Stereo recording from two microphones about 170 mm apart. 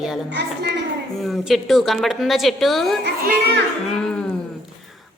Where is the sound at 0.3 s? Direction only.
90° right.